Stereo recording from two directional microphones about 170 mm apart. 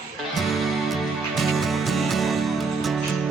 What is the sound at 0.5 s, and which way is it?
Music, centre (ahead or behind).